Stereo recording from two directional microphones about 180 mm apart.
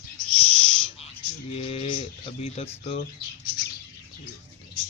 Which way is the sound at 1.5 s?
35° left (ahead or behind).